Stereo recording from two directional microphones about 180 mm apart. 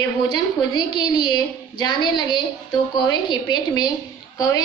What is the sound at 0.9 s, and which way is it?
A woman's voice, 25° left (ahead or behind).